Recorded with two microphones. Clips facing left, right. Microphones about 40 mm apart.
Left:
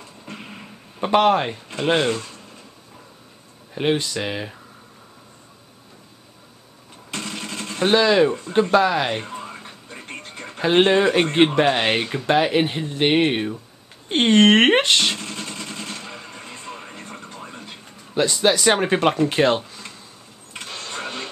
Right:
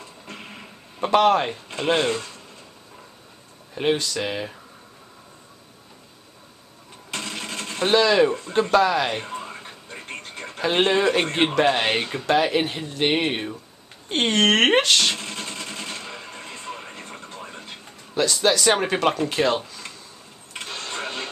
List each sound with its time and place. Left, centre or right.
0.2 s music: centre
3.7 s speech: centre
7.1 s music: centre
7.8 s speech: centre
9.2 s music: centre
10.6 s speech: centre
15.1 s vehicle: centre
18.1 s speech: centre
20.5 s engine starting: centre